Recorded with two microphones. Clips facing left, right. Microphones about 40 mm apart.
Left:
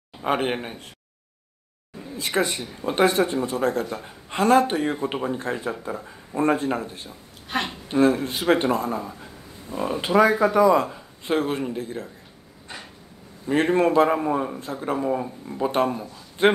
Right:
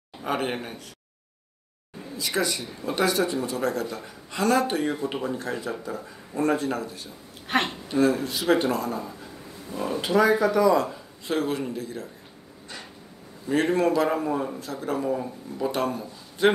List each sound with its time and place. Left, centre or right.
0.2 s a man's voice: left
2.1 s a woman's voice: left
7.5 s speech: right
7.9 s a woman's voice: left
9.2 s a sound: left
10.4 s a man's voice: left
13.5 s a woman's voice: left
14.0 s a man's voice: left
14.6 s a man's voice: left
16.4 s a woman's voice: left